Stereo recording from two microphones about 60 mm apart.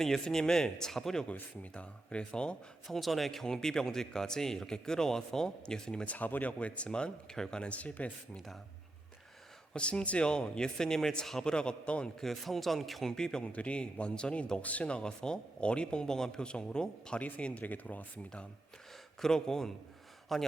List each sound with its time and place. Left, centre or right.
0.0 s speech: centre
1.2 s speech: left
2.8 s speech: centre
6.1 s speech: left
9.7 s speech: centre
12.2 s speech: centre
13.4 s speech: left
17.2 s speech: left
19.2 s speech: centre